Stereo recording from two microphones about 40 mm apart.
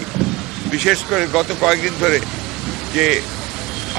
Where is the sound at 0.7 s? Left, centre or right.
Centre.